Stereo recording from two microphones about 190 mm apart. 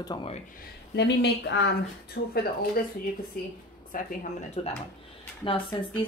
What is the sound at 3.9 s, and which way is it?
Speech, 45° left (ahead or behind).